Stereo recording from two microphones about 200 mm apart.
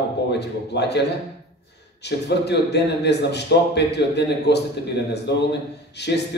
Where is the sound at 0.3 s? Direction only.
55° left (ahead or behind).